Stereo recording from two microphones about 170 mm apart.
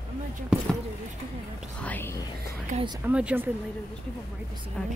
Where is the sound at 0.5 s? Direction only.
5° right (ahead or behind).